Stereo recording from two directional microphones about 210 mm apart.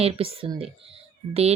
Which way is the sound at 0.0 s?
30° right (ahead or behind).